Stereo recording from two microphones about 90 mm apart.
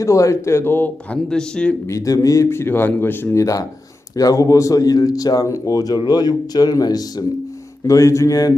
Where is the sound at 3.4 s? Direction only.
40° left (ahead or behind).